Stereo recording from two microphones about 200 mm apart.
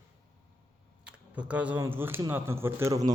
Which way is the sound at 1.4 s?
5° right (ahead or behind).